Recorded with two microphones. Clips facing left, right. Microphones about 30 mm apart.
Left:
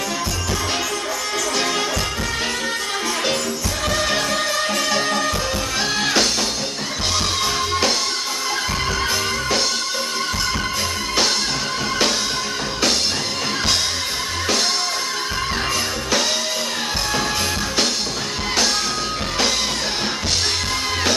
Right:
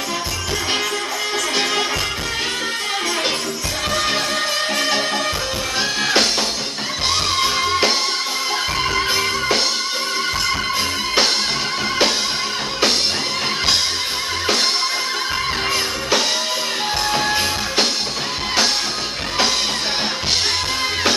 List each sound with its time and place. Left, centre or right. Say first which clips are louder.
3.9 s music: even; centre